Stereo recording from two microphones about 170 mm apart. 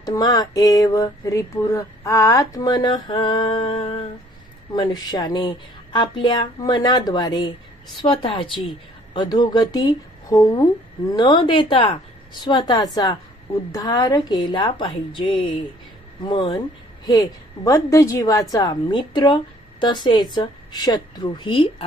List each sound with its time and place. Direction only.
0.0 s a woman's voice: 25° left (ahead or behind)